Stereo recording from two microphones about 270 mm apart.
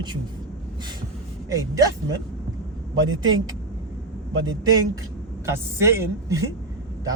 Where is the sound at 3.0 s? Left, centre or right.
Right.